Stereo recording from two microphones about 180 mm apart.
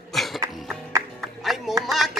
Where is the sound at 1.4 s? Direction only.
Centre (ahead or behind).